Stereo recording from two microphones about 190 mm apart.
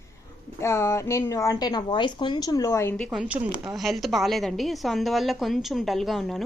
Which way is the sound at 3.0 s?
5° right (ahead or behind).